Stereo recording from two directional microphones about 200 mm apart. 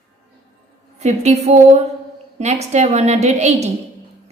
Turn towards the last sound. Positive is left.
turn(degrees=-35)  # may be behind; listen again after turning